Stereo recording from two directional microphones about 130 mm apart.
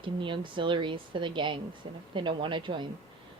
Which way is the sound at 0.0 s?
40° right (ahead or behind).